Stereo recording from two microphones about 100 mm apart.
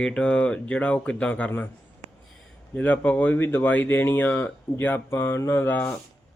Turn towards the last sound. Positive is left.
turn(degrees=15)  # may be behind; listen again after turning